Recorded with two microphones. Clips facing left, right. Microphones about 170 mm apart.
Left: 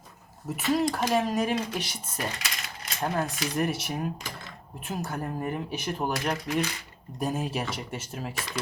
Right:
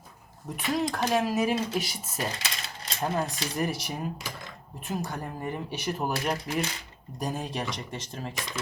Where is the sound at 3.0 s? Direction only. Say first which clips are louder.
Even; centre (ahead or behind).